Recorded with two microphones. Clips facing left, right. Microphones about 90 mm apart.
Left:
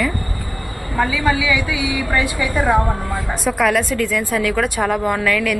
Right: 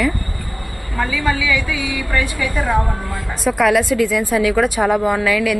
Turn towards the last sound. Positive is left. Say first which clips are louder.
# right 2 dB
turn(degrees=-5)  # may be behind; listen again after turning